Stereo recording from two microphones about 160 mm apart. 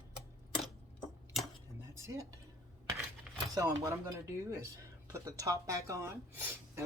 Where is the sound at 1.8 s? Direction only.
20° right (ahead or behind).